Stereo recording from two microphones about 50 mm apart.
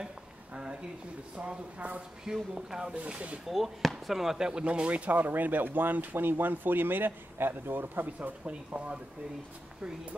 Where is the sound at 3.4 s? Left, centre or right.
Centre.